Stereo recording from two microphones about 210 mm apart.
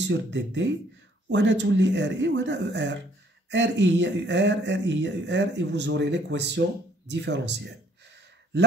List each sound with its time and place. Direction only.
0.0 s speech: 55° right (ahead or behind)